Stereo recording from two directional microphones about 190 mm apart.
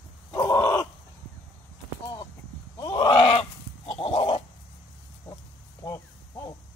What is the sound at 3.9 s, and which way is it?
Goat, 30° left (ahead or behind).